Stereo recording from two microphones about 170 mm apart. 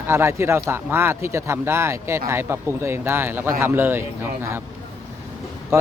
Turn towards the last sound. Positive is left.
turn(degrees=-15)  # may be behind; listen again after turning